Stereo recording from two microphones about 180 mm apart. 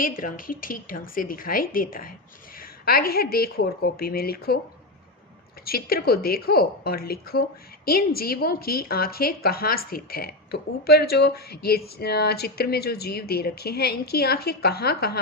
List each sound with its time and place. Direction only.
0.0 s a woman's voice: 50° left (ahead or behind)
5.6 s a woman's voice: 60° left (ahead or behind)